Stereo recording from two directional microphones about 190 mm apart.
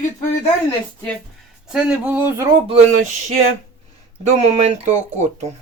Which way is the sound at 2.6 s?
40° right (ahead or behind).